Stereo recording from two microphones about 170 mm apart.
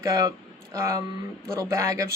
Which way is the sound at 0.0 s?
15° right (ahead or behind).